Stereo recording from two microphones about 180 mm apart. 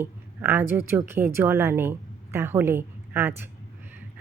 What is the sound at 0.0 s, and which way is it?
A woman's voice, 10° right (ahead or behind).